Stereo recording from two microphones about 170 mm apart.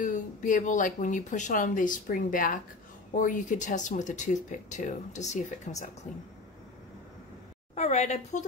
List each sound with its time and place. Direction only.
0.0 s speech: 50° left (ahead or behind)
7.7 s a woman's voice: 40° left (ahead or behind)